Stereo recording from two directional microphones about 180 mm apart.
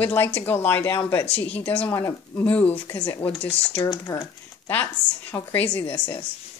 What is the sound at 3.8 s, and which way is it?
A woman's voice, 20° left (ahead or behind).